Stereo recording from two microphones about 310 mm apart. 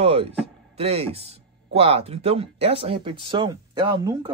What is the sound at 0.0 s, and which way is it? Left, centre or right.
Speech, centre.